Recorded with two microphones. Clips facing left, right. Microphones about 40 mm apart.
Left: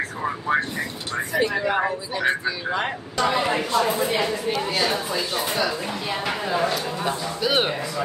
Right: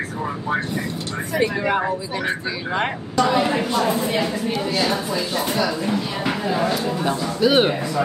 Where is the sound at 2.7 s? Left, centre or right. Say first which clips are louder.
Right 3 dB; centre.